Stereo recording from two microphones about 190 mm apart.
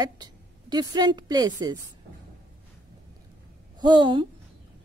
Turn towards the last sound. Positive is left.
turn(degrees=-25)  # may be behind; listen again after turning